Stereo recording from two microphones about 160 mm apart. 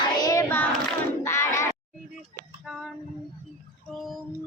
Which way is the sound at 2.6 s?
Centre (ahead or behind).